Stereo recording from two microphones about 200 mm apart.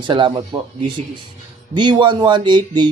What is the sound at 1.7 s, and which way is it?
Speech, 25° right (ahead or behind).